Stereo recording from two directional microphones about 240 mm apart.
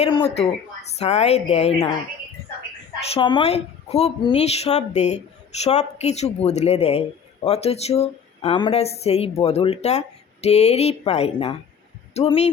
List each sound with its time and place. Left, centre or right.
0.0 s a woman's voice: left
3.1 s a woman's voice: centre